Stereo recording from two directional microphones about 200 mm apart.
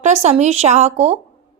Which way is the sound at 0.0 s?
35° right (ahead or behind).